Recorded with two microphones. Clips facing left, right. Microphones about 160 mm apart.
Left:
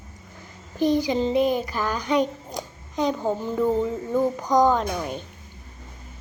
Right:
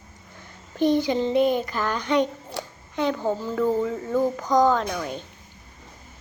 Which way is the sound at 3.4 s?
20° left (ahead or behind).